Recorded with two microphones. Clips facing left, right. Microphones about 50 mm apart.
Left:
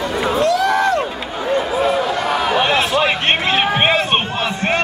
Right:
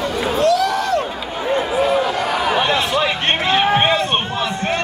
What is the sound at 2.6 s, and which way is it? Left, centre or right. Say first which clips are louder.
Chatter: left 2 dB; centre.